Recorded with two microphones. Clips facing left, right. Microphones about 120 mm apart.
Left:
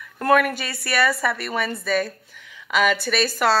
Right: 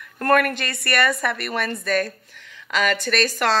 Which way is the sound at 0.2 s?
5° left (ahead or behind).